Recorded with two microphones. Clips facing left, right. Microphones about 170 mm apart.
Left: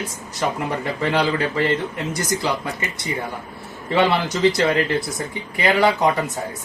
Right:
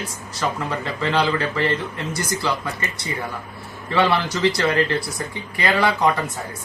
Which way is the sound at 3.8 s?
20° left (ahead or behind).